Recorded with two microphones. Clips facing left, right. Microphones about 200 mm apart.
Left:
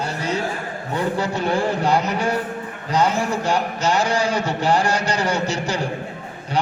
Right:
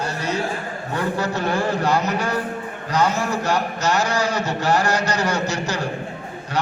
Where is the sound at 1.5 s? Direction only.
30° left (ahead or behind).